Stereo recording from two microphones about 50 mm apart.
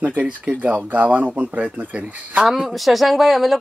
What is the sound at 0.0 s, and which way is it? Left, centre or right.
Speech, right.